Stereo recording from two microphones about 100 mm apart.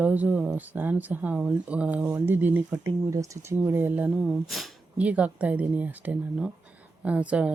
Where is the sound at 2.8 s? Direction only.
30° right (ahead or behind); by 4.7 s centre (ahead or behind).